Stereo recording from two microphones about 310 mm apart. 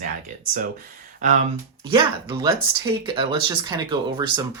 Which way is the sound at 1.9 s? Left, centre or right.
Centre.